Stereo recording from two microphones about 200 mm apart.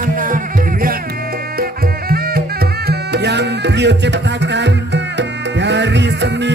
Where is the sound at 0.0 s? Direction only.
45° right (ahead or behind).